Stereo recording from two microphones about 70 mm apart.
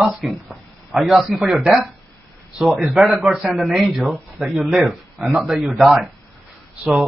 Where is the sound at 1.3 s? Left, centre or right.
Centre.